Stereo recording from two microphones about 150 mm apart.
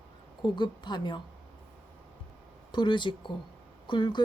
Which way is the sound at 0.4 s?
30° left (ahead or behind).